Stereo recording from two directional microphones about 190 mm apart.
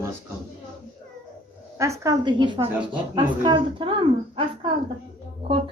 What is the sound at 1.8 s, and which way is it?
A woman's voice, 15° right (ahead or behind).